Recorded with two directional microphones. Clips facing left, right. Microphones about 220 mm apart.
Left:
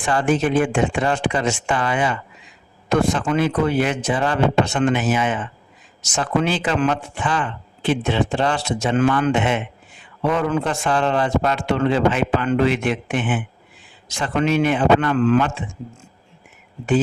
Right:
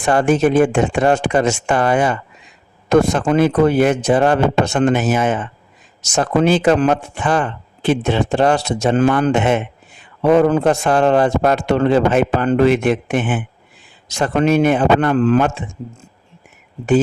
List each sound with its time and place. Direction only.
0.2 s speech: 45° right (ahead or behind)